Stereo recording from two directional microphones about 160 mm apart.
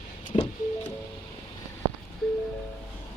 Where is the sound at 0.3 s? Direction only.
35° left (ahead or behind).